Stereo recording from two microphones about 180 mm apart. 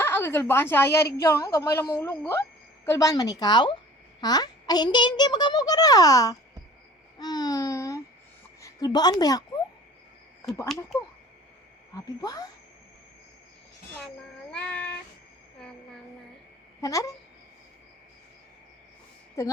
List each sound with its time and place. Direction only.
0.0 s a woman's voice: 15° left (ahead or behind)
11.9 s a child's voice: 20° left (ahead or behind)
14.5 s child singing: 5° left (ahead or behind)
16.8 s a child's voice: 20° left (ahead or behind)
19.4 s a woman's voice: 15° left (ahead or behind)